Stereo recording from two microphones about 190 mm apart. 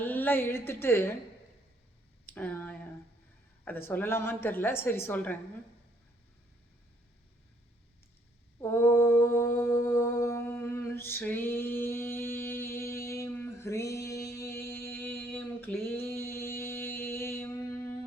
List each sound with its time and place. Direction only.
0.0 s a woman's voice: 10° left (ahead or behind)
2.3 s speech: 10° left (ahead or behind)
3.8 s a woman's voice: 10° left (ahead or behind)
8.6 s mantra: 10° left (ahead or behind)